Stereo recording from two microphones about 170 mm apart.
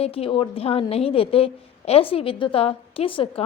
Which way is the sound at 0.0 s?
35° left (ahead or behind).